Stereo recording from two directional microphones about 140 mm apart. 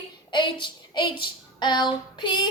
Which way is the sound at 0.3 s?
35° left (ahead or behind).